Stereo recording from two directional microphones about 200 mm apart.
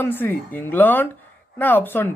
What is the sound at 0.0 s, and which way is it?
Speech, 10° left (ahead or behind).